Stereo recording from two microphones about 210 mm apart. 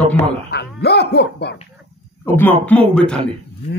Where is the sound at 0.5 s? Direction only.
50° left (ahead or behind).